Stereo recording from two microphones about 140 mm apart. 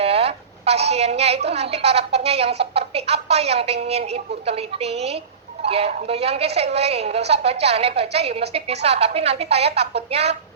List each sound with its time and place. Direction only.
0.0 s a woman's voice: 45° right (ahead or behind)